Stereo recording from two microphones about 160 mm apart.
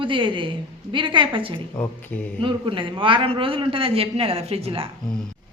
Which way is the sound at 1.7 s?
15° left (ahead or behind).